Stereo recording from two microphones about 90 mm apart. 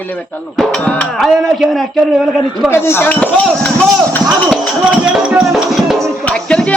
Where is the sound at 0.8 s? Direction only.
15° left (ahead or behind).